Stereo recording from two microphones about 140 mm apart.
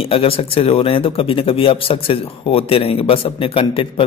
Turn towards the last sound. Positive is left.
turn(degrees=40)  # may be behind; listen again after turning